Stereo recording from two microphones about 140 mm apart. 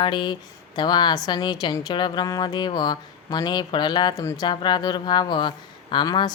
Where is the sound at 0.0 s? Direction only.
35° left (ahead or behind).